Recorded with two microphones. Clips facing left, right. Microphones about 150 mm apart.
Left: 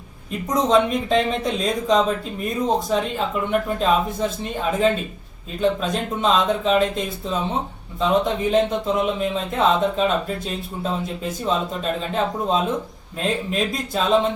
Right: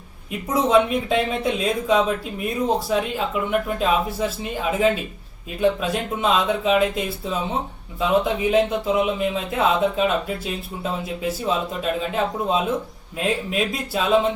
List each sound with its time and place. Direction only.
0.3 s speech: 5° right (ahead or behind)